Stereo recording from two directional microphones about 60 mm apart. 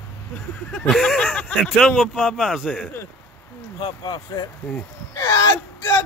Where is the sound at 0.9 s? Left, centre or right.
Centre.